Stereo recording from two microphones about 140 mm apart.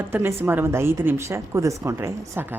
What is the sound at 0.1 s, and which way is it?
A woman's voice, 15° right (ahead or behind).